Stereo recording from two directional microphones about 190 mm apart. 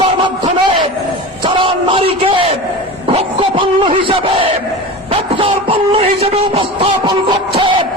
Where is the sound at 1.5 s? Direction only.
30° right (ahead or behind).